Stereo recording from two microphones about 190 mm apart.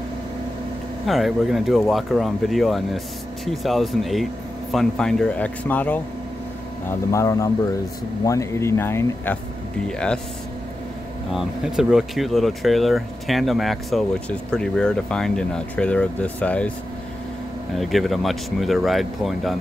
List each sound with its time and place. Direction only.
1.0 s speech: centre (ahead or behind)
11.3 s speech: centre (ahead or behind)
17.7 s speech: centre (ahead or behind)